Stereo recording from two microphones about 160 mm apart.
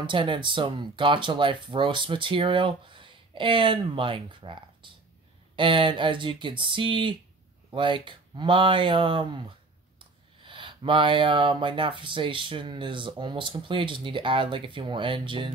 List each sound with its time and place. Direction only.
0.0 s speech: 30° right (ahead or behind)